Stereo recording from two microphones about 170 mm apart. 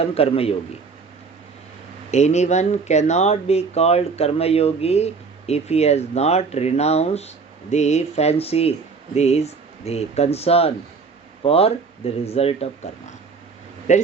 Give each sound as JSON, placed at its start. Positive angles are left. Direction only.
{"t": 0.0, "sound": "speech", "side_deg": 35}
{"t": 2.0, "sound": "speech", "side_deg": 40}
{"t": 13.9, "sound": "a man's voice", "side_deg": 45}